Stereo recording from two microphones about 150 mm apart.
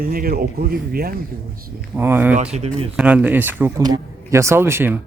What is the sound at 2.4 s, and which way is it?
Speech, 45° right (ahead or behind).